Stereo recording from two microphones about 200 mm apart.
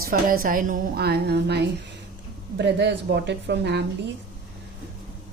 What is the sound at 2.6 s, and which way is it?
Speech, 60° right (ahead or behind).